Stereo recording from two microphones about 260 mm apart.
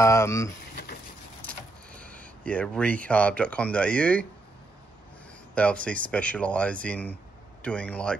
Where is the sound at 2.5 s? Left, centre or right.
Centre.